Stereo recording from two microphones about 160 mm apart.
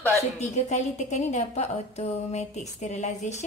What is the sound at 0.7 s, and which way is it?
Speech, 45° left (ahead or behind).